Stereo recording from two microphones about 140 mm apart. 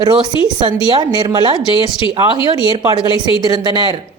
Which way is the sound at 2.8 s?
30° right (ahead or behind).